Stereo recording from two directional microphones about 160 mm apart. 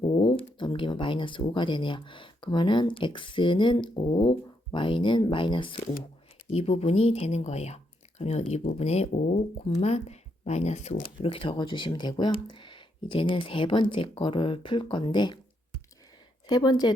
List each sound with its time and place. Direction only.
0.0 s speech: 35° left (ahead or behind)
16.5 s a woman's voice: 25° left (ahead or behind)